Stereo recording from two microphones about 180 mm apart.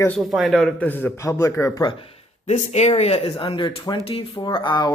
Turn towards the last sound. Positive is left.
turn(degrees=25)  # may be behind; listen again after turning